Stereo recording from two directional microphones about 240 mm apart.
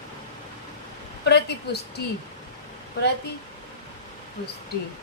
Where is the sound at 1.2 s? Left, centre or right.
Left.